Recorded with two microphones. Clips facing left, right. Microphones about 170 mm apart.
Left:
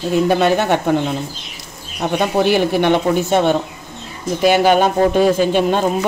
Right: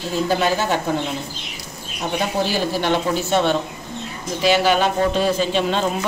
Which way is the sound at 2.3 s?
60° left (ahead or behind).